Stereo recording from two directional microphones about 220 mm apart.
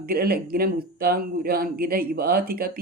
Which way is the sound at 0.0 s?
45° right (ahead or behind).